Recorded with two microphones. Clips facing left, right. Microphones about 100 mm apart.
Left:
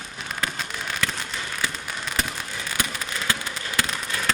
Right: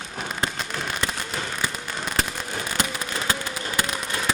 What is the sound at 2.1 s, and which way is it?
Fireworks, 40° right (ahead or behind).